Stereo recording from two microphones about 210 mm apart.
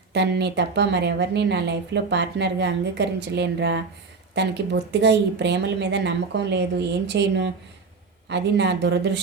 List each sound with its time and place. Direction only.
0.1 s speech: 55° right (ahead or behind)